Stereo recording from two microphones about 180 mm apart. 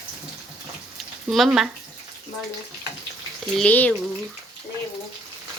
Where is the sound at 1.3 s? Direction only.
Centre (ahead or behind).